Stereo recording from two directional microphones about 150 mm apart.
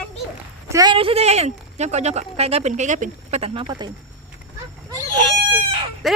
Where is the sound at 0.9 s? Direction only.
40° right (ahead or behind).